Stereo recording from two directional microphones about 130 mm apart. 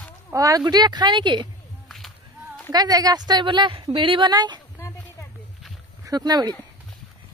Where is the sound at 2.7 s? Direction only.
30° right (ahead or behind).